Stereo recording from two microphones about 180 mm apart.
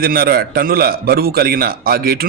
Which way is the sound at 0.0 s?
55° right (ahead or behind).